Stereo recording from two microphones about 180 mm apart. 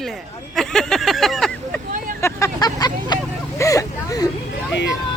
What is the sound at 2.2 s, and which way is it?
Vehicle, 20° left (ahead or behind).